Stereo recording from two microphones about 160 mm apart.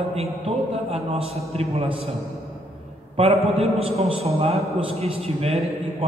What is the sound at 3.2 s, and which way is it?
A man's voice, 40° right (ahead or behind).